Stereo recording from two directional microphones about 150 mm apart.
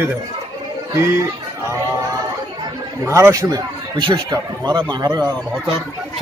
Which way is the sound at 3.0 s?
20° right (ahead or behind).